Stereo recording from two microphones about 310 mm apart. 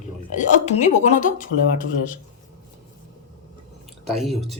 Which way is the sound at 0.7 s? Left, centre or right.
Left.